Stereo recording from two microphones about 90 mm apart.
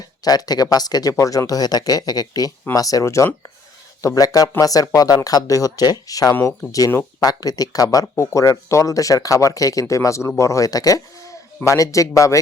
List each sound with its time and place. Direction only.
0.3 s speech: 45° left (ahead or behind)